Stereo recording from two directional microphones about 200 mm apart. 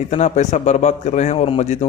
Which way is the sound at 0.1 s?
35° left (ahead or behind).